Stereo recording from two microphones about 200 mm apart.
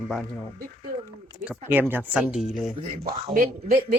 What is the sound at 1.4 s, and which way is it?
Speech, 10° right (ahead or behind).